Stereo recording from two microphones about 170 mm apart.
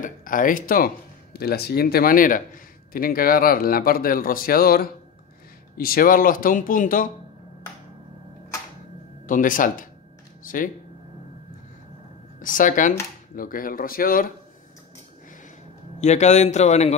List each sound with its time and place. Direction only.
0.0 s speech: 55° left (ahead or behind)
9.2 s speech: 50° left (ahead or behind)
12.4 s speech: 50° left (ahead or behind)
16.0 s speech: 45° left (ahead or behind)